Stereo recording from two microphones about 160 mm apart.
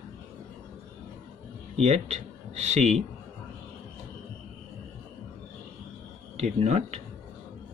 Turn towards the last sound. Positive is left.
turn(degrees=-45)  # may be behind; listen again after turning